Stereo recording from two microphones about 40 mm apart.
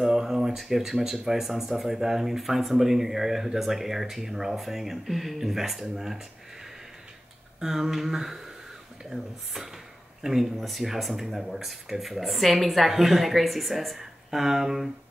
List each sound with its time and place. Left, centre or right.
0.0 s a sound: centre
0.6 s speech: centre
7.6 s speech: centre